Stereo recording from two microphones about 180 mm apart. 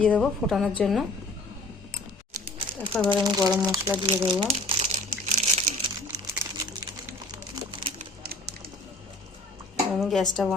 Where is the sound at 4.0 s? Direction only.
25° right (ahead or behind).